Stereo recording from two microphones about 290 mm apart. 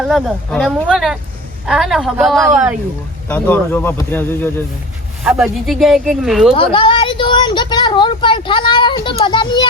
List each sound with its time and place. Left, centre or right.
0.1 s a woman's voice: centre
6.5 s a woman's voice: centre